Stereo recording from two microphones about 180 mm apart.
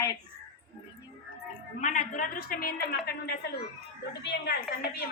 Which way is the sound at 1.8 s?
45° left (ahead or behind).